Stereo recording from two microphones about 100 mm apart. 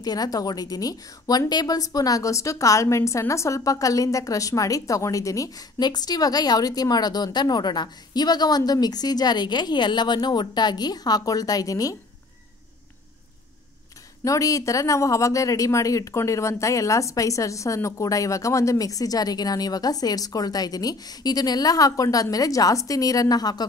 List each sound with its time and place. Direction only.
0.0 s a woman's voice: 40° left (ahead or behind)
14.2 s a woman's voice: 35° left (ahead or behind)